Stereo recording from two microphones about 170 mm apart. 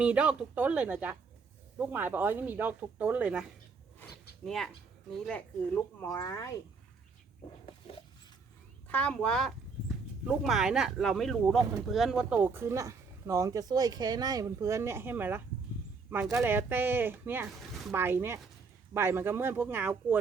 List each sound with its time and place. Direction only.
0.0 s speech: 10° right (ahead or behind)
4.4 s speech: centre (ahead or behind)
6.2 s speech: 20° left (ahead or behind)
7.6 s a sound: 35° left (ahead or behind)
8.9 s speech: 10° left (ahead or behind); by 20.1 s 10° right (ahead or behind)